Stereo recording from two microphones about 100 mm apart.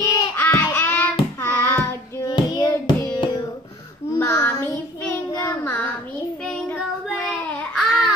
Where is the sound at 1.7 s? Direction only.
20° left (ahead or behind).